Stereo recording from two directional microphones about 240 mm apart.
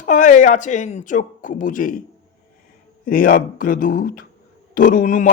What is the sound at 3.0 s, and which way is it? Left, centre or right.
Speech, left.